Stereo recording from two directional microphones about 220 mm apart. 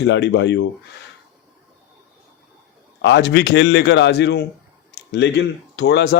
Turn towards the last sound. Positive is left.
turn(degrees=50)  # may be behind; listen again after turning